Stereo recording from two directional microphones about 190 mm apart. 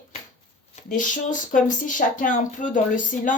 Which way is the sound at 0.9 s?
45° left (ahead or behind).